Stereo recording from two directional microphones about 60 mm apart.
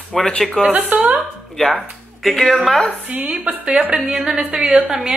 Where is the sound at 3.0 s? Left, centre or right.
Right.